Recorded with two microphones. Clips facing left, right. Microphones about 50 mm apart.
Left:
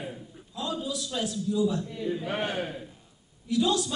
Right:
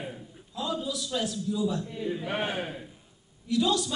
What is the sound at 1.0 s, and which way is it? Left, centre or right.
A man's voice, centre.